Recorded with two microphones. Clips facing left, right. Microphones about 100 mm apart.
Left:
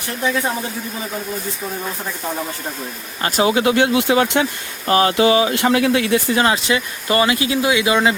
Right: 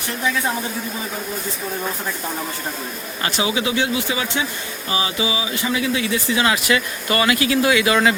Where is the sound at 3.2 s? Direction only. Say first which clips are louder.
Left 6 dB; 45° left (ahead or behind).